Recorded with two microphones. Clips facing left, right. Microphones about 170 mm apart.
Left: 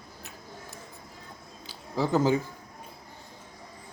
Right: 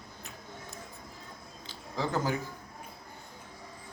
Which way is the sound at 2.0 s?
20° left (ahead or behind).